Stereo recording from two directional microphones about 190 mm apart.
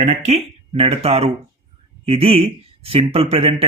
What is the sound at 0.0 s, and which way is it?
A man's voice, 35° right (ahead or behind).